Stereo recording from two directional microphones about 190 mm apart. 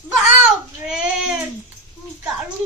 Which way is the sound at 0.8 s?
5° right (ahead or behind).